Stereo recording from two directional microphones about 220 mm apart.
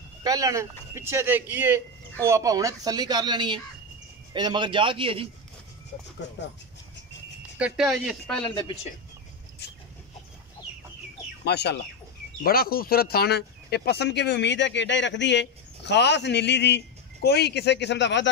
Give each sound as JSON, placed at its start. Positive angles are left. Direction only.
{"t": 0.2, "sound": "a man's voice", "side_deg": -15}
{"t": 6.2, "sound": "speech", "side_deg": 55}
{"t": 7.5, "sound": "speech", "side_deg": -5}
{"t": 11.4, "sound": "speech", "side_deg": 50}